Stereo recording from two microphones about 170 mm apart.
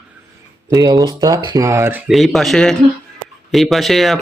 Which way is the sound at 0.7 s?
20° right (ahead or behind).